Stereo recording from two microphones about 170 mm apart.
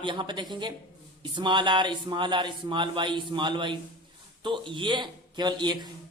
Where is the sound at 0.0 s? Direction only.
30° right (ahead or behind).